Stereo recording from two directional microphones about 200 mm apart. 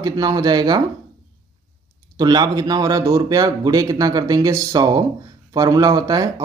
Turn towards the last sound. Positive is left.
turn(degrees=-20)  # may be behind; listen again after turning